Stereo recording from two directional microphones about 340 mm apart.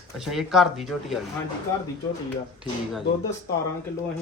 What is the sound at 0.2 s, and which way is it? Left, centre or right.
A man's voice, centre.